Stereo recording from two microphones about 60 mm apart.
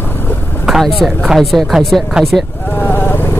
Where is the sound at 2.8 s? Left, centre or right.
Left.